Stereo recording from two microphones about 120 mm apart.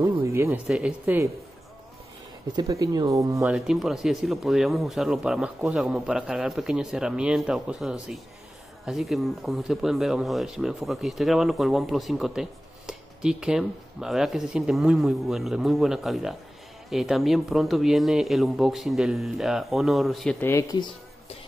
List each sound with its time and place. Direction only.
0.2 s a sound: 20° right (ahead or behind)
0.7 s speech: 10° right (ahead or behind)
2.5 s speech: 30° right (ahead or behind)
3.4 s speech: 5° right (ahead or behind)
20.3 s speech: 20° left (ahead or behind)